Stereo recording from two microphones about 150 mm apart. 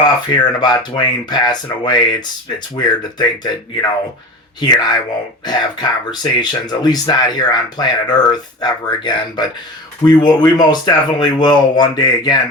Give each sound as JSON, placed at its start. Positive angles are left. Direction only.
{"t": 0.0, "sound": "speech", "side_deg": 30}